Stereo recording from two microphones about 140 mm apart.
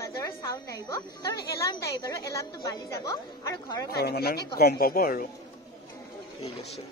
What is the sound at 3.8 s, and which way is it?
Speech, 90° left.